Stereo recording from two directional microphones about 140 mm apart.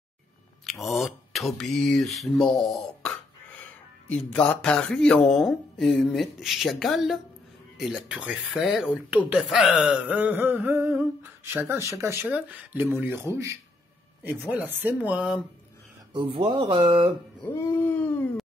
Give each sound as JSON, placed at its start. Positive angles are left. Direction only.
{"t": 0.7, "sound": "speech", "side_deg": 0}
{"t": 4.1, "sound": "speech", "side_deg": 10}
{"t": 16.1, "sound": "speech", "side_deg": -35}
{"t": 17.6, "sound": "a sound", "side_deg": 20}